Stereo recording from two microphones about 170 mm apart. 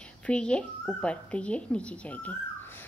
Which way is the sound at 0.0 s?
5° left (ahead or behind).